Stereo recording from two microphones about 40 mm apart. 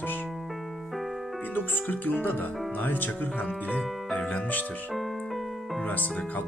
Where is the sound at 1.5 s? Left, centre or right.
Left.